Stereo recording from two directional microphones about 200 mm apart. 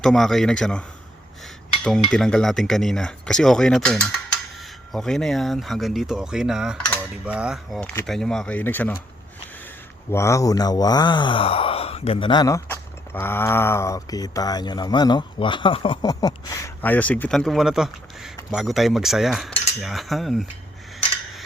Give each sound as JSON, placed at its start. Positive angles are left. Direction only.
{"t": 0.0, "sound": "speech", "side_deg": 0}
{"t": 2.1, "sound": "speech", "side_deg": 5}